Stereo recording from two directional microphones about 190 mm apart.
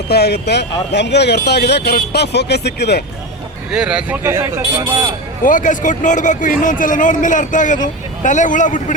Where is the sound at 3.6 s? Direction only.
5° right (ahead or behind).